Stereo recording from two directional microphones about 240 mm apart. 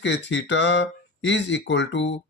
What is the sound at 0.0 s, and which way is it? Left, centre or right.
Speech, left.